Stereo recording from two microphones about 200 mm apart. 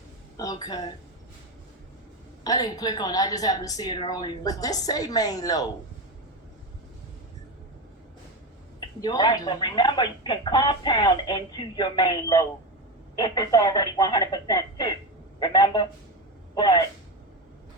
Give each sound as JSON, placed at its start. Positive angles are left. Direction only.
{"t": 0.3, "sound": "speech", "side_deg": 20}
{"t": 2.4, "sound": "speech", "side_deg": 20}
{"t": 8.8, "sound": "speech", "side_deg": 20}